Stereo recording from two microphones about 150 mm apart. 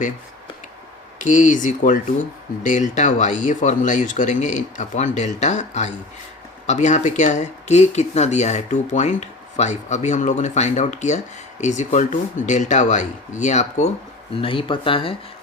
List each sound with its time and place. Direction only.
1.2 s speech: 55° left (ahead or behind)
14.4 s speech: 35° left (ahead or behind)